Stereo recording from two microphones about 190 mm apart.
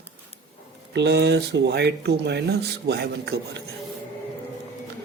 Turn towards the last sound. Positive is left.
turn(degrees=-60)  # may be behind; listen again after turning